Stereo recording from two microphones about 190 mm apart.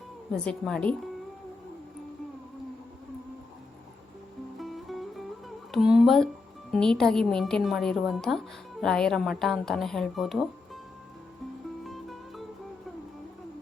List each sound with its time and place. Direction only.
0.4 s a woman's voice: 5° left (ahead or behind)
4.5 s music: centre (ahead or behind)
6.7 s a woman's voice: 5° left (ahead or behind)
11.9 s music: centre (ahead or behind)